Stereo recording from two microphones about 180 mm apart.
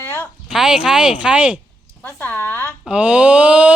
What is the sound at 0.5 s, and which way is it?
Speech, 5° right (ahead or behind).